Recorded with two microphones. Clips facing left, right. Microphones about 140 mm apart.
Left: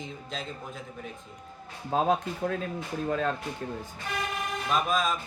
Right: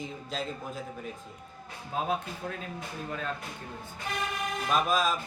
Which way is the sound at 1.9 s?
40° left (ahead or behind).